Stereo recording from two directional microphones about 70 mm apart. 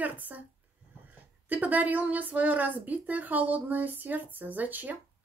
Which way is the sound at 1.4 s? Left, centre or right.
Right.